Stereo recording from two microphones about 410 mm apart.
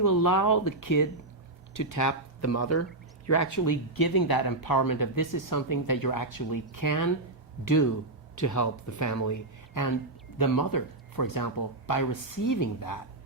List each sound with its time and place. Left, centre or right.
0.0 s speech: left